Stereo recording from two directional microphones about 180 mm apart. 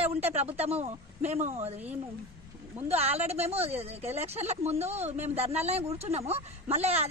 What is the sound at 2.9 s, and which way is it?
Speech, 35° right (ahead or behind).